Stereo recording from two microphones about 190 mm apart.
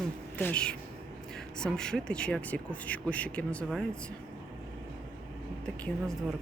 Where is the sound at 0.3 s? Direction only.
10° left (ahead or behind).